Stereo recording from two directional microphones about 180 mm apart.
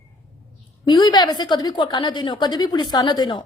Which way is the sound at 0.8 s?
25° left (ahead or behind).